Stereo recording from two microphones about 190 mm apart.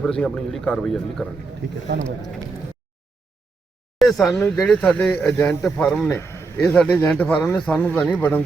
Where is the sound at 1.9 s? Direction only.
60° right (ahead or behind).